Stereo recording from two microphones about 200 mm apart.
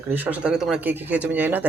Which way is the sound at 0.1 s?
10° right (ahead or behind).